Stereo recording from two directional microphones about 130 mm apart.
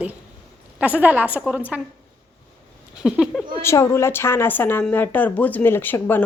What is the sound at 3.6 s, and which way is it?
Speech, 20° left (ahead or behind).